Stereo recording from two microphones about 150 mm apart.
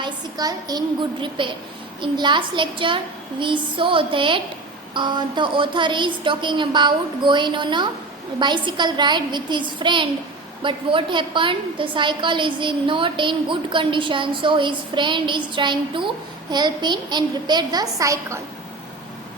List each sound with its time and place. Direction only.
0.0 s a woman's voice: 25° right (ahead or behind)